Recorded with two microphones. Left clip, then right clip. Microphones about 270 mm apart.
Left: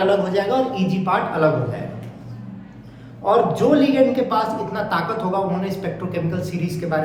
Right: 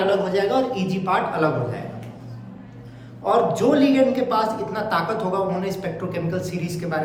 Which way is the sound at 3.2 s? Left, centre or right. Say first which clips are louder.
Left 2 dB; centre.